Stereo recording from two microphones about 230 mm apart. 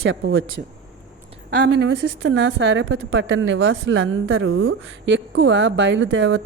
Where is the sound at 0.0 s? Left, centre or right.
Right.